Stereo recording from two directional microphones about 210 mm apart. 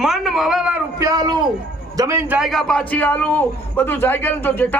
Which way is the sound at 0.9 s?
15° right (ahead or behind).